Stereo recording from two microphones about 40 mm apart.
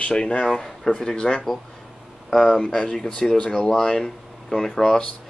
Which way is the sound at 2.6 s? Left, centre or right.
Centre.